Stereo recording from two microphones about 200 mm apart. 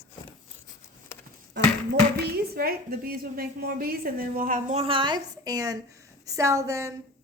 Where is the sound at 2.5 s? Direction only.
50° right (ahead or behind); by 6.9 s 15° right (ahead or behind).